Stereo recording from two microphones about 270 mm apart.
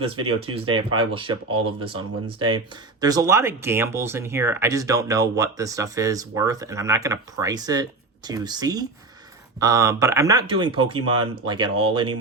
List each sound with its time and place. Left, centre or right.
0.0 s speech: right
0.3 s speech: centre